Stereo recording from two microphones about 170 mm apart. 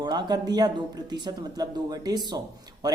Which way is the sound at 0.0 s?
25° right (ahead or behind).